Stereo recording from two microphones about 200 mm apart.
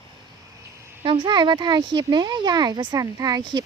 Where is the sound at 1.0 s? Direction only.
25° right (ahead or behind).